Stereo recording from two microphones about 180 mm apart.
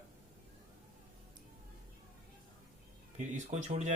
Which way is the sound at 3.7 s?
45° right (ahead or behind).